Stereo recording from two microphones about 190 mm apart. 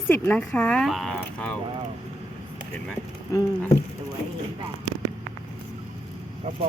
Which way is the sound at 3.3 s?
15° left (ahead or behind).